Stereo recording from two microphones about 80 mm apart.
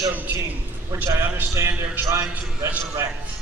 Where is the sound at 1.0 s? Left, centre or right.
Right.